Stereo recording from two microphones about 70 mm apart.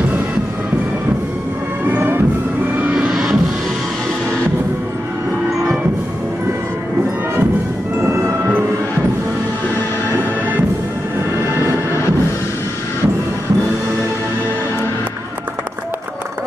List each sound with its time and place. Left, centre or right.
1.9 s music: right
2.9 s music: centre
8.0 s music: right